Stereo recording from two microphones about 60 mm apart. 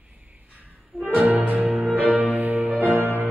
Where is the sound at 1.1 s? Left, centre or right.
Right.